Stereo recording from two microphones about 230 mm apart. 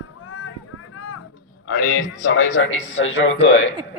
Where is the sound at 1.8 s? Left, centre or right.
Left.